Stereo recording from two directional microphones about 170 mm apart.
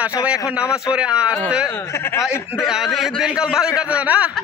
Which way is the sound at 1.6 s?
15° left (ahead or behind).